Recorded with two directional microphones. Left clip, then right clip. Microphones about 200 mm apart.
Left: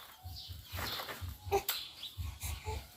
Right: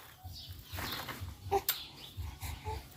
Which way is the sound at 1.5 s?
10° right (ahead or behind).